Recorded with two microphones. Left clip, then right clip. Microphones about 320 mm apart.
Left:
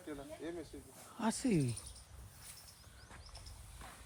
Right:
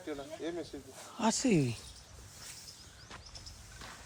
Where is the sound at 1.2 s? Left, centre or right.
Centre.